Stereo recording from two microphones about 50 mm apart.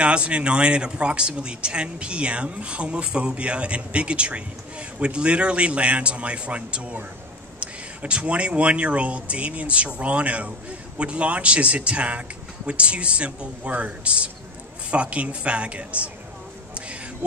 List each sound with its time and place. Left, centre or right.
0.0 s a man's voice: right